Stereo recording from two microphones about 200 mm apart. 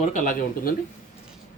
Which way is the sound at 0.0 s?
40° left (ahead or behind).